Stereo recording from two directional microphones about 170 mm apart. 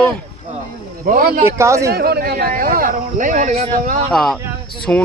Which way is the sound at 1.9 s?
65° right (ahead or behind).